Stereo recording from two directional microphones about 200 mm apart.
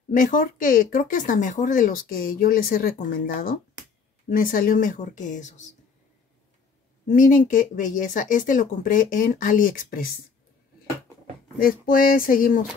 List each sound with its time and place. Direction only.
0.1 s speech: 40° left (ahead or behind)
7.1 s speech: 40° left (ahead or behind)
11.6 s speech: 45° left (ahead or behind)